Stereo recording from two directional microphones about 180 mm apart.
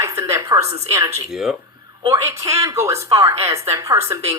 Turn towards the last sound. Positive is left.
turn(degrees=-15)  # may be behind; listen again after turning